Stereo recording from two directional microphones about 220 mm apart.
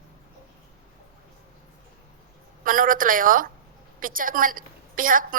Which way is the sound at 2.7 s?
40° right (ahead or behind).